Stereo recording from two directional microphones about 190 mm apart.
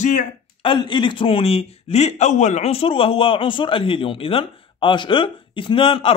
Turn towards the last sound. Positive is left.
turn(degrees=30)  # may be behind; listen again after turning